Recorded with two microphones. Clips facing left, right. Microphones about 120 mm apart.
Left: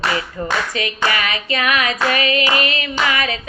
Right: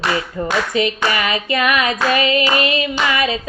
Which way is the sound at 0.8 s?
25° right (ahead or behind).